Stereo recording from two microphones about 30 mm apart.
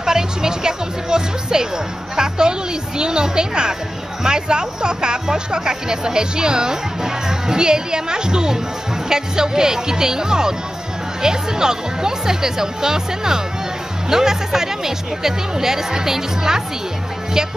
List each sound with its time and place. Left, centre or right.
0.0 s a woman's voice: right